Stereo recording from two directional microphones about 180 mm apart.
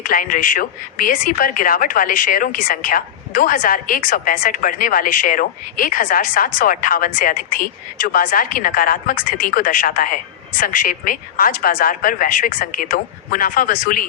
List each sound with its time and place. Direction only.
0.0 s speech: 50° left (ahead or behind)